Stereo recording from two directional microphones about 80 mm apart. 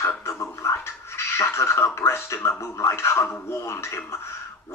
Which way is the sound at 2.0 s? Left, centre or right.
Left.